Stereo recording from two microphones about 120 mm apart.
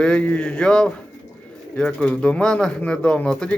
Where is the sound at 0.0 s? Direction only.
10° left (ahead or behind).